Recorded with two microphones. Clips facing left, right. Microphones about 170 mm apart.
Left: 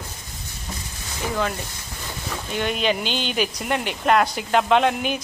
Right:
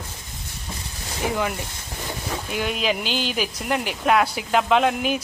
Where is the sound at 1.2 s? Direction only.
15° right (ahead or behind).